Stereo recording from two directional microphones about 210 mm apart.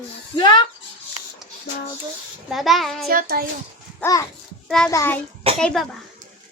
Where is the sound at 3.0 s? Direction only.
45° right (ahead or behind).